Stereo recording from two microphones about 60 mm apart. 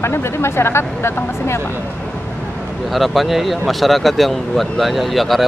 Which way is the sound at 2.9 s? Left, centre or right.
Centre.